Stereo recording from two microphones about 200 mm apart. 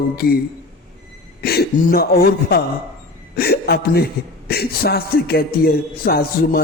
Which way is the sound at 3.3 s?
50° left (ahead or behind).